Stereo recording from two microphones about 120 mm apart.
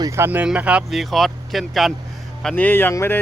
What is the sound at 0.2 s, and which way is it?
Speech, 15° right (ahead or behind).